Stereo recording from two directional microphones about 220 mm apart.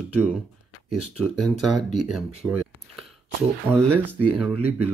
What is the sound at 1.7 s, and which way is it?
Speech, 90° right.